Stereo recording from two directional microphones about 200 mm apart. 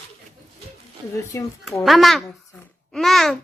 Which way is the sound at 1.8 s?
Centre (ahead or behind).